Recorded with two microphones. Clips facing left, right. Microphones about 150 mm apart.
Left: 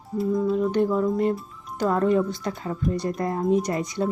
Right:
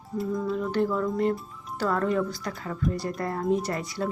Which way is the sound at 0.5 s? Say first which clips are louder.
Left 2 dB; 20° left (ahead or behind).